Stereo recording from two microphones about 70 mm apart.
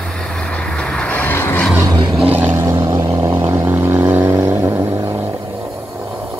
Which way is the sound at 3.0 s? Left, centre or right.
Right.